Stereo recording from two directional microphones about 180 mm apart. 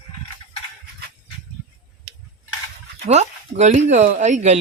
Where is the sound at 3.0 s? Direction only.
40° right (ahead or behind).